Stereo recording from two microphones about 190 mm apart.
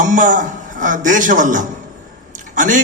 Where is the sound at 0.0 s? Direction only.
45° right (ahead or behind).